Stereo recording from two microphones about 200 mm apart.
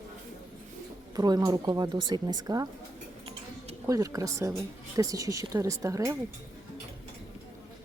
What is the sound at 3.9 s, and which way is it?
A woman's voice, 15° right (ahead or behind).